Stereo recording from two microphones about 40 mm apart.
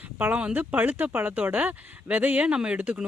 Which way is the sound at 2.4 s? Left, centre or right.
Right.